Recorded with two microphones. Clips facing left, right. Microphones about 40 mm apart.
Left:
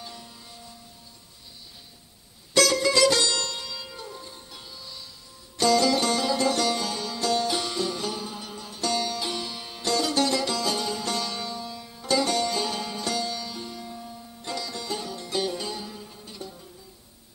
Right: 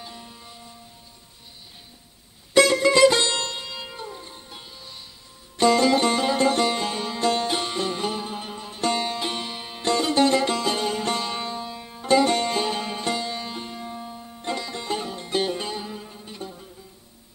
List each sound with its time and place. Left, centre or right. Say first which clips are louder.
0.0 s music: right 2 dB; right
2.5 s music: right 4 dB; right